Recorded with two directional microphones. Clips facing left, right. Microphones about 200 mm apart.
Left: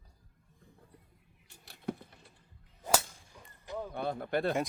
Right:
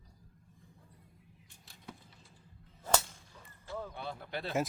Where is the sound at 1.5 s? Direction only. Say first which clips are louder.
Left 13 dB; 65° left (ahead or behind).